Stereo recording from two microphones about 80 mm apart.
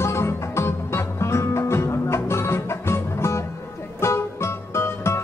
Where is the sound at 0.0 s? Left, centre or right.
Left.